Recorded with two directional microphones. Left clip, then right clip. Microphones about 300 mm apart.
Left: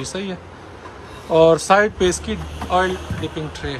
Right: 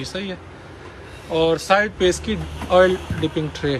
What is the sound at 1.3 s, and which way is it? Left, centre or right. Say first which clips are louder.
Speech: left 4 dB; centre.